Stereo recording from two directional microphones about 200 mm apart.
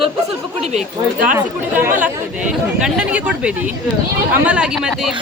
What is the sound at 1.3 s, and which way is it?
Speech, 10° right (ahead or behind).